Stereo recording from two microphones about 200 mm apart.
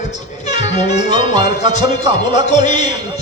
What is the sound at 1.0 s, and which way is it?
Music, 20° right (ahead or behind).